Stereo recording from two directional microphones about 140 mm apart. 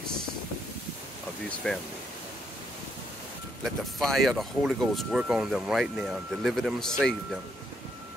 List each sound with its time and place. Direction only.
1.6 s speech: 5° left (ahead or behind)
3.6 s speech: centre (ahead or behind)